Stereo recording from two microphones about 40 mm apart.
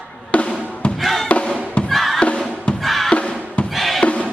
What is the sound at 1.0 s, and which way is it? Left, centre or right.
Music, centre.